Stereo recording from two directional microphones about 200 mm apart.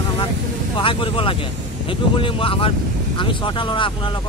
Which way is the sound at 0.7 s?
25° left (ahead or behind).